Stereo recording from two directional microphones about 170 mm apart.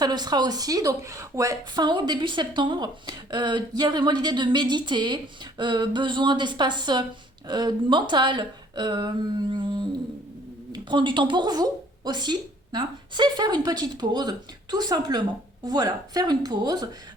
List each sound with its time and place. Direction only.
0.0 s a woman's voice: 25° right (ahead or behind)